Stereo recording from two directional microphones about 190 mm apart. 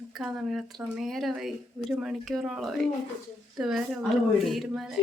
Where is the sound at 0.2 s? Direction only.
Centre (ahead or behind).